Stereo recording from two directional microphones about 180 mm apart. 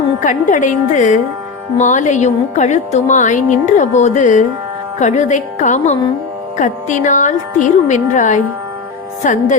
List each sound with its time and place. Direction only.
0.2 s a woman's voice: 45° left (ahead or behind)